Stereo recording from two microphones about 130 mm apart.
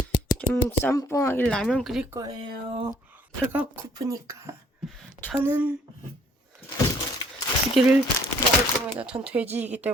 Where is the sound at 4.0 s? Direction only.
25° right (ahead or behind).